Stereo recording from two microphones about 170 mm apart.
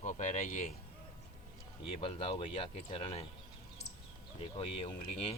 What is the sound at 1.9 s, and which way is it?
Speech, 30° left (ahead or behind).